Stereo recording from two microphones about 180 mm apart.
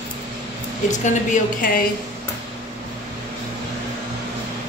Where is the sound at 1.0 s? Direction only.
45° left (ahead or behind).